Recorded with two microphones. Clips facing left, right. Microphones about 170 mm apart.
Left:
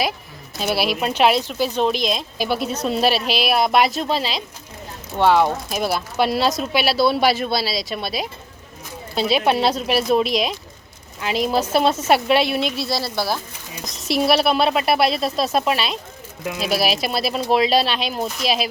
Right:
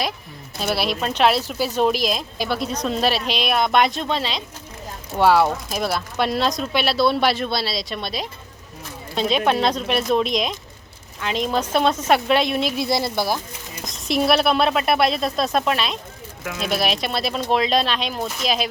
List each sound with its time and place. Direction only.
0.6 s a woman's voice: 5° left (ahead or behind)
5.1 s speech: 5° right (ahead or behind)
6.1 s a woman's voice: 5° left (ahead or behind)
12.7 s speech: 20° right (ahead or behind)
13.8 s a woman's voice: centre (ahead or behind)